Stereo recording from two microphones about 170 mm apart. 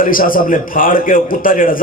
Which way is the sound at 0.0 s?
55° left (ahead or behind).